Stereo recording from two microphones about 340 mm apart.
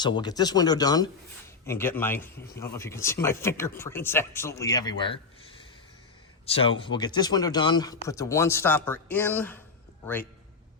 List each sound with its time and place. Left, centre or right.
0.0 s speech: centre
6.4 s a sound: centre
6.7 s speech: centre